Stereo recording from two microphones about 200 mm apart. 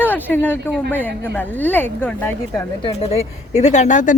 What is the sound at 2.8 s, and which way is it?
A woman's voice, 30° left (ahead or behind).